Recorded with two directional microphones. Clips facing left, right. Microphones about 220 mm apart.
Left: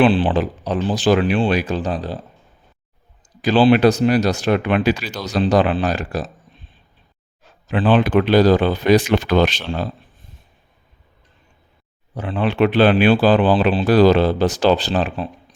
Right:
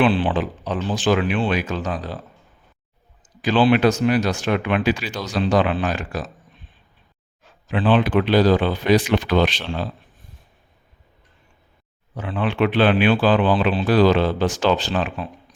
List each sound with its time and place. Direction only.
0.0 s speech: 30° left (ahead or behind)
3.4 s speech: 35° left (ahead or behind)
7.4 s speech: 40° left (ahead or behind)
12.1 s speech: 35° left (ahead or behind)